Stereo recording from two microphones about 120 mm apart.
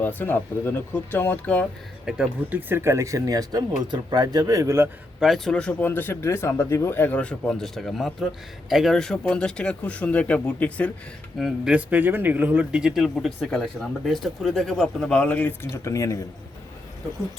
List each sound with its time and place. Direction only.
0.0 s speech: 15° left (ahead or behind)
2.0 s speech: 10° right (ahead or behind)
5.2 s speech: centre (ahead or behind)
11.3 s speech: 5° right (ahead or behind); by 16.2 s 25° left (ahead or behind)